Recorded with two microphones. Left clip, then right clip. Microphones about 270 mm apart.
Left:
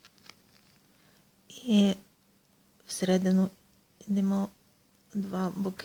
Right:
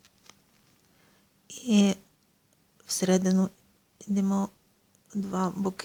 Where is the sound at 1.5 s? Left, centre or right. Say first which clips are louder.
Right 1 dB; centre.